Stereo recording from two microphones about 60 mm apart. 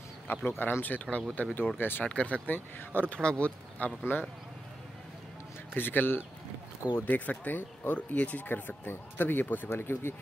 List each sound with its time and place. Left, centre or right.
0.5 s speech: left
2.0 s speech: centre
3.2 s speech: centre
4.0 s speech: left
5.8 s speech: left
9.7 s speech: left